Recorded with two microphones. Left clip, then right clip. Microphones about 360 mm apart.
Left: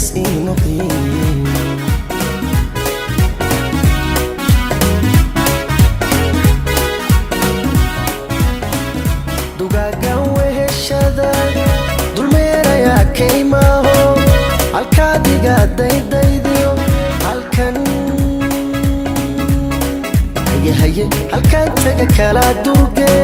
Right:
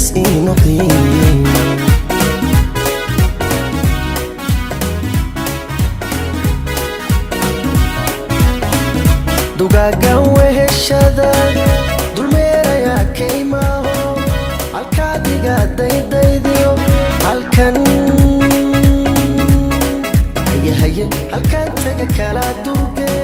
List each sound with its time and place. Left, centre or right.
0.2 s music: right
4.4 s music: left
7.4 s music: centre
9.6 s music: right; by 11.7 s centre
12.2 s music: centre; by 14.3 s left
14.9 s music: left
16.5 s music: centre
17.2 s music: right
20.5 s music: centre
21.4 s music: left